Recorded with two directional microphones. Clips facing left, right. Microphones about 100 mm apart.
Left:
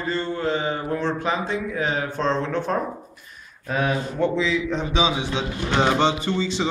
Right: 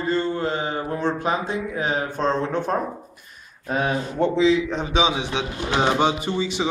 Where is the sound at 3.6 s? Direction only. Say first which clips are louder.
Even; 30° right (ahead or behind).